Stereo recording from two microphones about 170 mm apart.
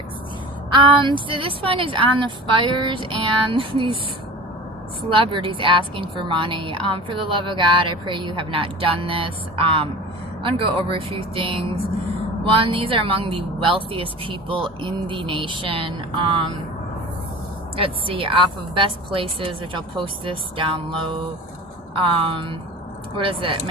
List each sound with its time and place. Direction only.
0.7 s a woman's voice: 30° right (ahead or behind)
5.1 s a woman's voice: 30° right (ahead or behind)
17.7 s a woman's voice: 30° right (ahead or behind)
22.2 s a woman's voice: 30° right (ahead or behind)